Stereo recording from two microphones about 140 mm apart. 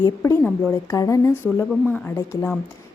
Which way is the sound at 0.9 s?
25° left (ahead or behind).